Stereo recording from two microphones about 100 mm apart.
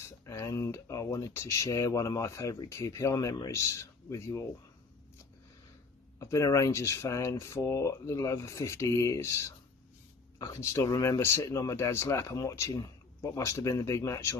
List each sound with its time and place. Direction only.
0.3 s speech: 30° left (ahead or behind)
6.1 s speech: 30° left (ahead or behind)